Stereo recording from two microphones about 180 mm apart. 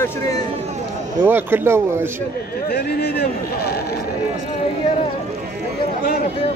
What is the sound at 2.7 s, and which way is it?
Speech, 65° left (ahead or behind).